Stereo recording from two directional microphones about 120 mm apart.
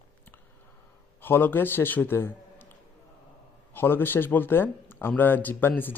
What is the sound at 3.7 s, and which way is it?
Speech, 15° left (ahead or behind).